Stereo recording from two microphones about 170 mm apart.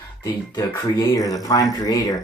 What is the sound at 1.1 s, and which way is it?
Speech, 20° left (ahead or behind).